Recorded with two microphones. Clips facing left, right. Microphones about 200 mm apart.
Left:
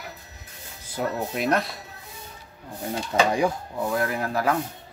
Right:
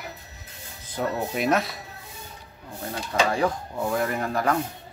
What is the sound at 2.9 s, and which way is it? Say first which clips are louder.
Speech: left 2 dB; 20° left (ahead or behind).